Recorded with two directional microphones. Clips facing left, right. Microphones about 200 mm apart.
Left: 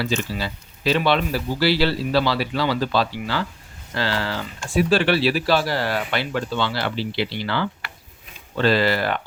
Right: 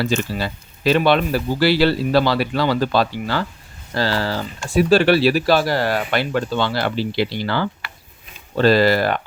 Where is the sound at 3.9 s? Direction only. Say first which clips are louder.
Right 4 dB; 40° right (ahead or behind).